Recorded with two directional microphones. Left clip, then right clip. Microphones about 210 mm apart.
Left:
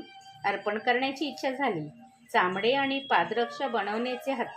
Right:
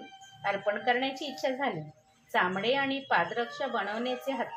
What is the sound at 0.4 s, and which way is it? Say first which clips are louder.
A woman's voice: left 1 dB; 35° left (ahead or behind).